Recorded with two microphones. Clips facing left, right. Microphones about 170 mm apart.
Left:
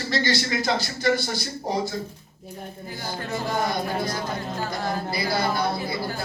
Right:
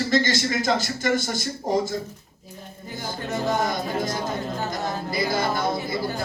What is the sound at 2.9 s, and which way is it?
Music, 20° right (ahead or behind).